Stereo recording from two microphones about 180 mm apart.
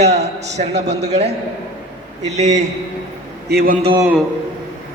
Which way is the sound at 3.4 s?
55° right (ahead or behind).